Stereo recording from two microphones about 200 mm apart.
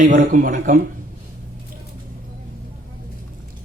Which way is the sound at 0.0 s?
40° right (ahead or behind).